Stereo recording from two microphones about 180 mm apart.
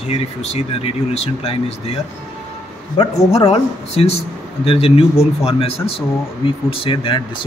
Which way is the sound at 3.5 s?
35° left (ahead or behind).